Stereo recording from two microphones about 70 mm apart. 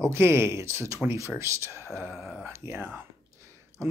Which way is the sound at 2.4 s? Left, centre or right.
Right.